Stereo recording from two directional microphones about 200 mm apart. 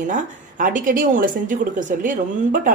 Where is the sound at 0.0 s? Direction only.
40° right (ahead or behind).